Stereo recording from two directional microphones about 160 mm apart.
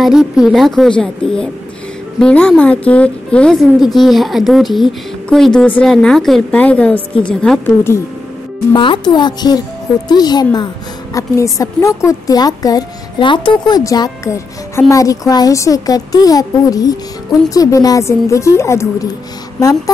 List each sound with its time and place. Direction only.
0.0 s a woman's voice: 5° right (ahead or behind)
8.7 s a woman's voice: 30° left (ahead or behind)